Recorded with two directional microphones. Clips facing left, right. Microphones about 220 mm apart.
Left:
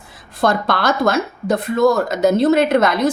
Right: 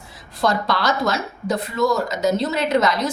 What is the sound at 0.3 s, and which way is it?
Speech, 55° left (ahead or behind).